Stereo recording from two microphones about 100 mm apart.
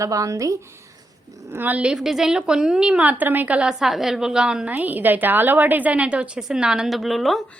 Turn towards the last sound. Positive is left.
turn(degrees=0)  # may be behind; listen again after turning